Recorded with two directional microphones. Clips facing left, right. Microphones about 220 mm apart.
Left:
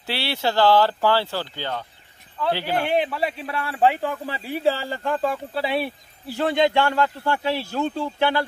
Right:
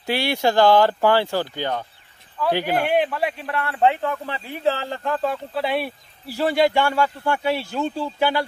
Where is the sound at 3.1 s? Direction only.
5° left (ahead or behind).